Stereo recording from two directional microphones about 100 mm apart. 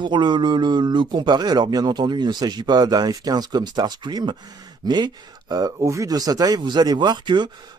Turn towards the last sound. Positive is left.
turn(degrees=-50)  # may be behind; listen again after turning